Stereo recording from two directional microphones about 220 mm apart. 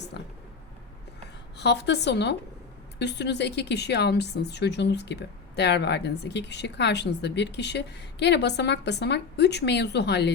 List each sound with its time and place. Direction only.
0.1 s speech: 50° left (ahead or behind)
1.5 s speech: 50° left (ahead or behind)